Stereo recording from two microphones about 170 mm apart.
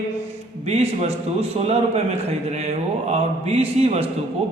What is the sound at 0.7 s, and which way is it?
A man's voice, 40° right (ahead or behind).